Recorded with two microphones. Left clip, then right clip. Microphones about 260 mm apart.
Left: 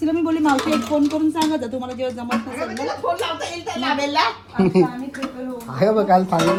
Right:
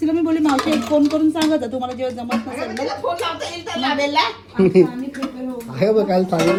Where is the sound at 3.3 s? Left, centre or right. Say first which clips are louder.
Even; centre.